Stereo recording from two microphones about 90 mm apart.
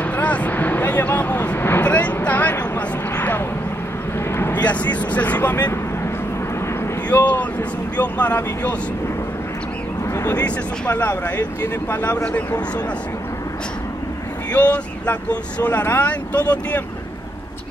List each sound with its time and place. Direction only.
0.0 s vehicle: 15° left (ahead or behind)
4.6 s speech: 15° left (ahead or behind)
7.1 s a sound: 20° left (ahead or behind)
8.0 s speech: 20° left (ahead or behind)
10.1 s a sound: 25° left (ahead or behind)
10.4 s speech: 20° left (ahead or behind)
14.5 s speech: 15° left (ahead or behind)